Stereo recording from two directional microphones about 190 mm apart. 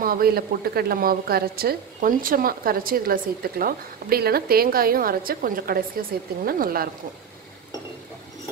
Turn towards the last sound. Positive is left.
turn(degrees=-50)  # may be behind; listen again after turning